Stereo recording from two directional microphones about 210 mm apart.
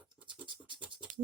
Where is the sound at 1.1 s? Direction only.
40° right (ahead or behind).